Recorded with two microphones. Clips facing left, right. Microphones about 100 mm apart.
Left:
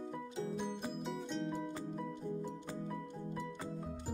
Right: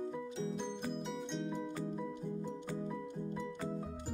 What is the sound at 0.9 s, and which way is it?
Music, centre (ahead or behind).